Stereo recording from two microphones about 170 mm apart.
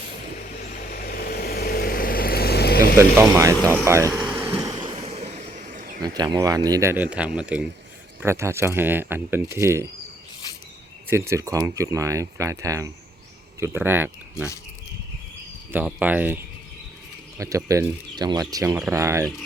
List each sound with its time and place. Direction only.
0.6 s vehicle: 60° left (ahead or behind)
3.0 s speech: 15° right (ahead or behind)
4.5 s waves: 30° right (ahead or behind)
5.1 s a sound: 40° right (ahead or behind)
6.0 s speech: 25° right (ahead or behind)
11.1 s speech: 15° right (ahead or behind)
15.7 s speech: 10° right (ahead or behind)